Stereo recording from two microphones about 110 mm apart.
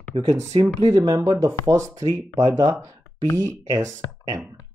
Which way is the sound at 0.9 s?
35° right (ahead or behind).